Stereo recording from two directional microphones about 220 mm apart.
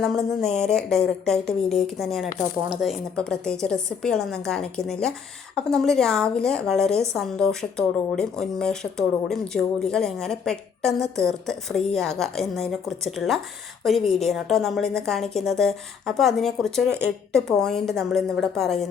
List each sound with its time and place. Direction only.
0.0 s speech: centre (ahead or behind)